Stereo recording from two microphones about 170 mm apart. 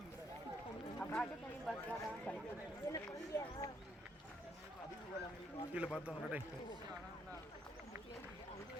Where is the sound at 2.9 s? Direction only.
20° left (ahead or behind).